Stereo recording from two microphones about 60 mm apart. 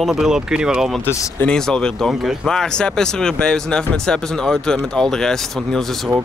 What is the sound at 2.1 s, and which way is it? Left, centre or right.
Speech, centre.